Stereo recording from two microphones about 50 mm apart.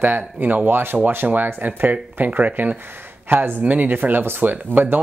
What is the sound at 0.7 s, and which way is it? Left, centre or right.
Speech, right.